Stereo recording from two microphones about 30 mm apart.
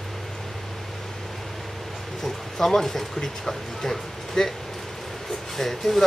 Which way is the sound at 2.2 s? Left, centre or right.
Centre.